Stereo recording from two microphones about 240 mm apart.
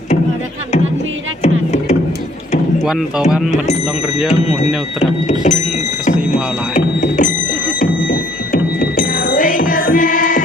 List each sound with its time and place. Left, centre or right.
1.4 s music: left
2.8 s speech: centre
4.4 s speech: left
6.1 s music: left